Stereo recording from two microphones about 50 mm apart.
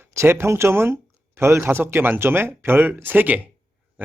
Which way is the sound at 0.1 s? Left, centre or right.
Right.